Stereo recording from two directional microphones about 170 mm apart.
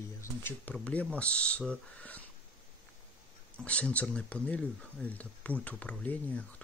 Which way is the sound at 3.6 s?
5° left (ahead or behind).